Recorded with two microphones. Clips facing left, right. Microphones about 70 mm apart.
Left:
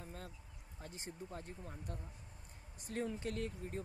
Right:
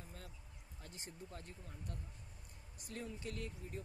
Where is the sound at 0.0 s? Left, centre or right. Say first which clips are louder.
Left 5 dB; left.